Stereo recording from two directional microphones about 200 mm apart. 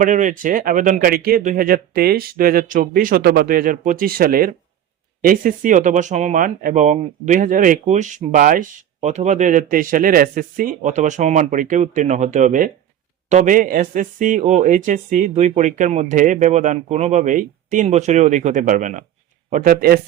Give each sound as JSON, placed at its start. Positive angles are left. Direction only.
{"t": 0.0, "sound": "a man's voice", "side_deg": -40}